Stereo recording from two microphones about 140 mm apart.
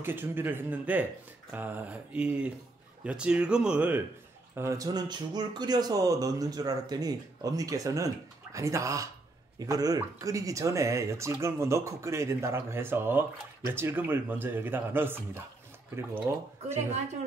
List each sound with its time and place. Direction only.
0.0 s speech: 15° right (ahead or behind)
4.6 s speech: 25° right (ahead or behind)